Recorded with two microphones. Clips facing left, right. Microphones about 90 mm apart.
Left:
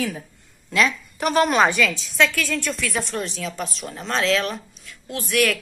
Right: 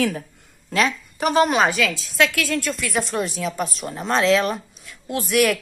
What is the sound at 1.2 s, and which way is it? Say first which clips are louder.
A woman's voice: even; 15° right (ahead or behind).